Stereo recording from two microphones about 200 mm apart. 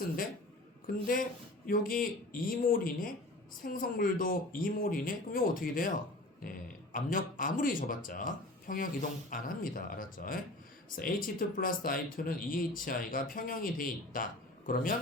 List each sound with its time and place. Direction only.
1.0 s speech: 45° left (ahead or behind)